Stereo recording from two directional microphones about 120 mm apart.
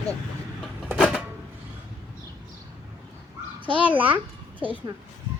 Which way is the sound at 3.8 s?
15° right (ahead or behind).